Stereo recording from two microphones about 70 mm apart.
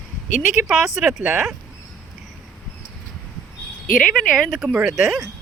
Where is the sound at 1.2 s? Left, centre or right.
Right.